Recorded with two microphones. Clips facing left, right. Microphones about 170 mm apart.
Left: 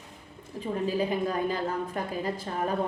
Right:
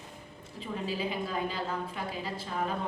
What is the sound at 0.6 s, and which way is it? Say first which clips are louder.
A woman's voice: left 6 dB; 45° left (ahead or behind).